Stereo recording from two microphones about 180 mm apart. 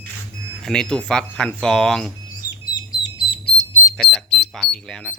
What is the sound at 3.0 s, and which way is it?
Fire alarm, 30° left (ahead or behind).